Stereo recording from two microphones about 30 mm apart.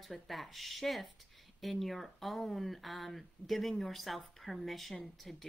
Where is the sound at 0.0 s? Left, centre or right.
Centre.